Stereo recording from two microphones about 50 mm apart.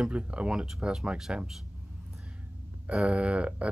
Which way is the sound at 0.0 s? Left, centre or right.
Right.